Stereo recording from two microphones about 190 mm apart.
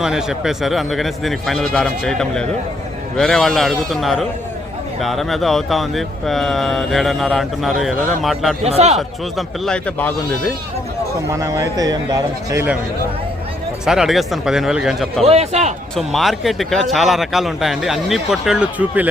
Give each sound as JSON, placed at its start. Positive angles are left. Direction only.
{"t": 0.0, "sound": "speech", "side_deg": -5}
{"t": 8.6, "sound": "a man's voice", "side_deg": -35}
{"t": 9.0, "sound": "speech", "side_deg": 0}
{"t": 11.3, "sound": "a man's voice", "side_deg": -15}
{"t": 13.8, "sound": "speech", "side_deg": -5}
{"t": 15.2, "sound": "a man's voice", "side_deg": -35}
{"t": 16.0, "sound": "speech", "side_deg": 0}